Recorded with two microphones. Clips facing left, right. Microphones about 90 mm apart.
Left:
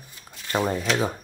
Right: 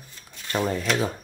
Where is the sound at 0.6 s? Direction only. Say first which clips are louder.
Even; 5° left (ahead or behind).